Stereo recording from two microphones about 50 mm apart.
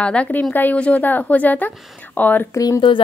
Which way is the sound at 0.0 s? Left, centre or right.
Left.